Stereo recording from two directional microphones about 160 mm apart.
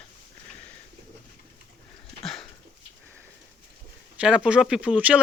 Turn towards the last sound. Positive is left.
turn(degrees=-10)  # may be behind; listen again after turning